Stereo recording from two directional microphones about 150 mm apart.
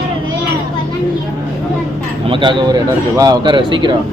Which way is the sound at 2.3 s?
30° right (ahead or behind).